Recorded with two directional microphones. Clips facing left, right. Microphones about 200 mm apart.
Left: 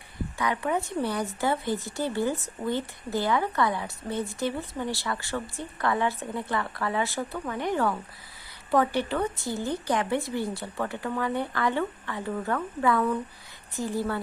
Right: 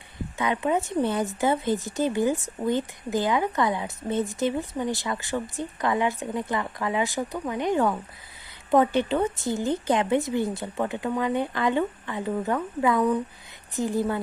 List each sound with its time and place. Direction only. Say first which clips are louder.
0.3 s a woman's voice: right 3 dB; 20° right (ahead or behind)